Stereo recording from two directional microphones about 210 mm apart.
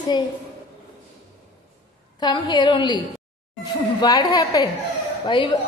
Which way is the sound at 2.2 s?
20° left (ahead or behind).